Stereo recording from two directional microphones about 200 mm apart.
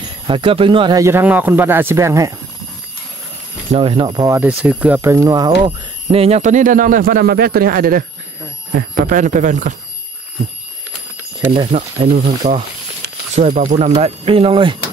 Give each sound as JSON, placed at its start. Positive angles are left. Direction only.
{"t": 0.3, "sound": "speech", "side_deg": -25}
{"t": 3.7, "sound": "speech", "side_deg": -25}
{"t": 6.0, "sound": "speech", "side_deg": -30}
{"t": 11.5, "sound": "speech", "side_deg": -25}